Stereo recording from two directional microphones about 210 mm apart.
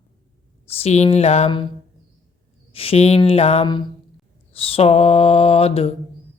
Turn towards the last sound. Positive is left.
turn(degrees=30)  # may be behind; listen again after turning